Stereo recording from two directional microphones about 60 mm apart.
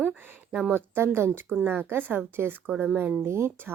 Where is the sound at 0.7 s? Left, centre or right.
Right.